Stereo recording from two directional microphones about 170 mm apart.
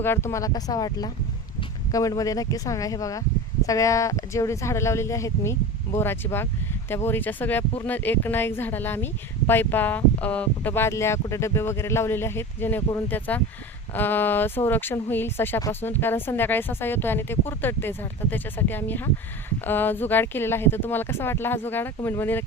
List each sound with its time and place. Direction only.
0.0 s speech: 15° left (ahead or behind)